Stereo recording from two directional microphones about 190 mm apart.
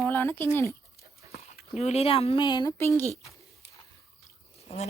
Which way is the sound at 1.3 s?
35° left (ahead or behind).